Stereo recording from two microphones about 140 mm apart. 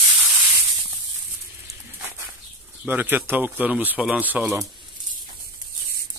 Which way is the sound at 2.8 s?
15° right (ahead or behind).